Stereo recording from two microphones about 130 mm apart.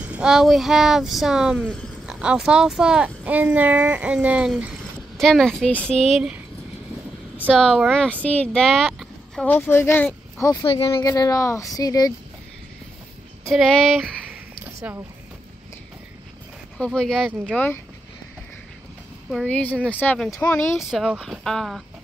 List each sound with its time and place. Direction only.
0.0 s speech: 10° right (ahead or behind)
5.1 s speech: 5° left (ahead or behind)
7.5 s speech: 5° left (ahead or behind)
10.6 s speech: 45° left (ahead or behind)
11.0 s speech: 30° left (ahead or behind)
13.5 s speech: 5° left (ahead or behind)
14.8 s speech: 20° right (ahead or behind)
16.7 s speech: 5° left (ahead or behind)
19.4 s speech: 10° left (ahead or behind)
20.9 s speech: centre (ahead or behind)